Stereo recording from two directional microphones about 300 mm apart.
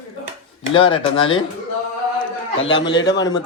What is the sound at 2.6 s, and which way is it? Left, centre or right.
Speech, left.